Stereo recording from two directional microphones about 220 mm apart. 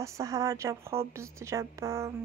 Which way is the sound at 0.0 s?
15° right (ahead or behind).